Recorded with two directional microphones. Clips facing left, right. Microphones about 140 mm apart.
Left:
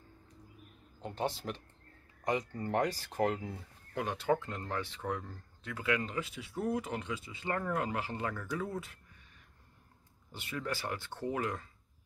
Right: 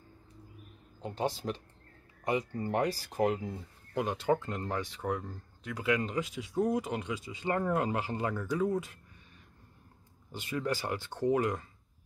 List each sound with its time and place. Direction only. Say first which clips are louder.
1.0 s speech: right 3 dB; 15° right (ahead or behind)
10.3 s speech: right 5 dB; 15° right (ahead or behind)